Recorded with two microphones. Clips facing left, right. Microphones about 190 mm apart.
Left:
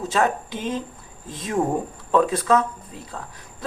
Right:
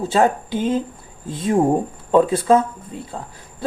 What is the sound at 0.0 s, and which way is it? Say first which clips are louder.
Speech: right 5 dB; 30° right (ahead or behind).